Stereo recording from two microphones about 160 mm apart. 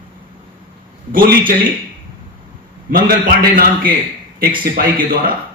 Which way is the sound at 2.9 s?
60° right (ahead or behind).